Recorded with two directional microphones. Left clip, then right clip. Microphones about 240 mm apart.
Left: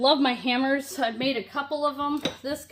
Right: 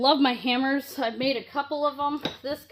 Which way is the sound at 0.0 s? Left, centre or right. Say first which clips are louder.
Even; right.